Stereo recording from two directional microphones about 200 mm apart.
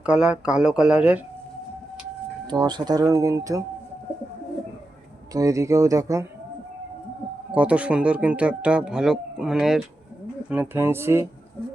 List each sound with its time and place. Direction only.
0.0 s speech: 5° right (ahead or behind)
2.5 s speech: 20° right (ahead or behind)
5.3 s speech: 15° right (ahead or behind)
7.5 s speech: 5° right (ahead or behind)